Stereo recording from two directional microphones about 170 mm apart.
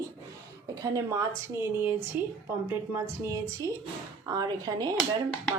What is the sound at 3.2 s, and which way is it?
A woman's voice, 20° right (ahead or behind).